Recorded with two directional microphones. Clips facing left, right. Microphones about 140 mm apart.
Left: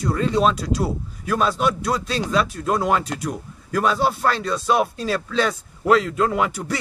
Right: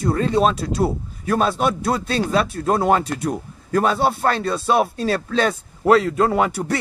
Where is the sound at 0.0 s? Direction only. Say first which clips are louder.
Right 1 dB; 50° right (ahead or behind).